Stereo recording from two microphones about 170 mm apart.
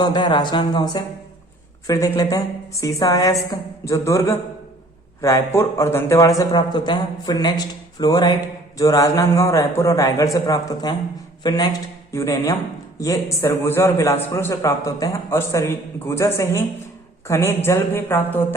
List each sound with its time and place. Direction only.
0.0 s a man's voice: 25° left (ahead or behind)
2.1 s a man's voice: 20° left (ahead or behind)